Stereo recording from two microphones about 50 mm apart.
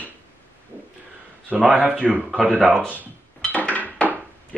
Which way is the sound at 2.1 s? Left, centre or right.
Right.